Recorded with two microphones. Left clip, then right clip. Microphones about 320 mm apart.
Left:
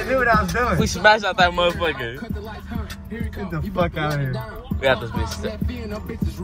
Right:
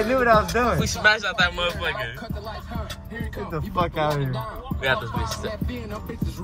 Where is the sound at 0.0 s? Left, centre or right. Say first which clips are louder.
Even; right.